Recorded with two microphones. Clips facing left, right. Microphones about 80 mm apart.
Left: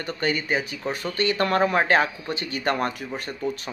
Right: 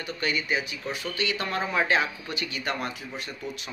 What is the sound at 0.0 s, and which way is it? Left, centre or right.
Speech, left.